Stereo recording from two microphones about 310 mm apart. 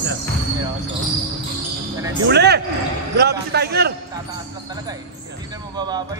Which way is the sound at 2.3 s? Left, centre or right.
Right.